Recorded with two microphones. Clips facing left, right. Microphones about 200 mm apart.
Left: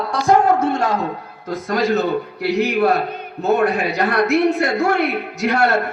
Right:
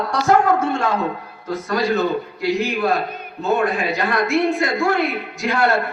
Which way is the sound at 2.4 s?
65° left (ahead or behind).